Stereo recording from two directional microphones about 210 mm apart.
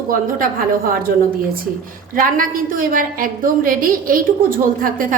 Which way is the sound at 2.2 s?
40° right (ahead or behind).